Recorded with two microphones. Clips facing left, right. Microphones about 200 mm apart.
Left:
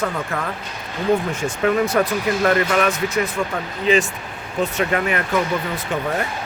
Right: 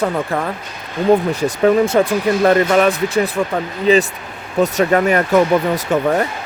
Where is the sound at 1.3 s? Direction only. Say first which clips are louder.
Right 6 dB; 35° right (ahead or behind).